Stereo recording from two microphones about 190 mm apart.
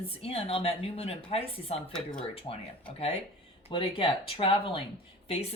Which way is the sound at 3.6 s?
30° left (ahead or behind).